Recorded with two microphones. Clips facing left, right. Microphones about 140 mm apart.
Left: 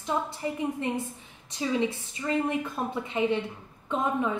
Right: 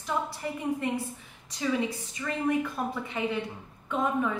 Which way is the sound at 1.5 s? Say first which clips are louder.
Left 1 dB; 25° left (ahead or behind).